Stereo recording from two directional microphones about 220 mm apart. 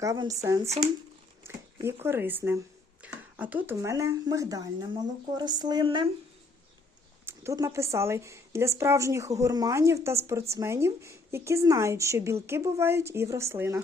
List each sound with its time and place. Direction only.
0.0 s a woman's voice: 15° right (ahead or behind)
7.3 s a woman's voice: 15° right (ahead or behind)